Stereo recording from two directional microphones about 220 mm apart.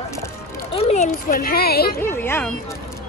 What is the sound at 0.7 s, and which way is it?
Speech, 25° left (ahead or behind).